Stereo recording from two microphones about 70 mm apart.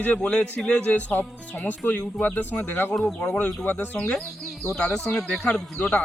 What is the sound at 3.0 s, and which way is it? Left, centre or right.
Speech, centre.